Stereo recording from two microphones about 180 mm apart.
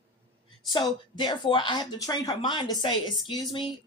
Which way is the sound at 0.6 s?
25° left (ahead or behind).